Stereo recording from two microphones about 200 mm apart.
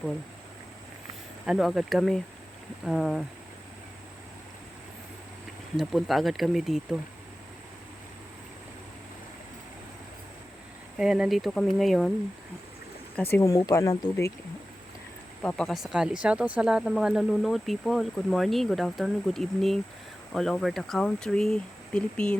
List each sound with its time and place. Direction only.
1.5 s speech: centre (ahead or behind)
5.7 s speech: centre (ahead or behind)
10.9 s speech: 5° right (ahead or behind)
13.3 s speech: 15° left (ahead or behind)
15.4 s speech: 5° left (ahead or behind)